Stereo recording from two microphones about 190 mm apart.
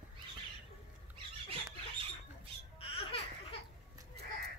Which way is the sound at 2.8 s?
30° left (ahead or behind).